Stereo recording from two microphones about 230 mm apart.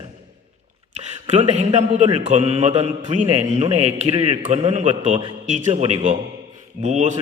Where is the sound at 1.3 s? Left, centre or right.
Right.